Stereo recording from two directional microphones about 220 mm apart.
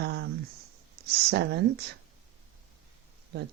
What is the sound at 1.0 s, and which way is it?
Speech, 50° right (ahead or behind).